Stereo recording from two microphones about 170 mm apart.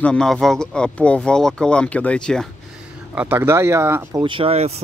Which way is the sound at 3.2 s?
10° right (ahead or behind).